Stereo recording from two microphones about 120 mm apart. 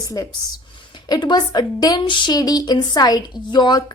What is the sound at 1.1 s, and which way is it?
A woman's voice, 40° left (ahead or behind).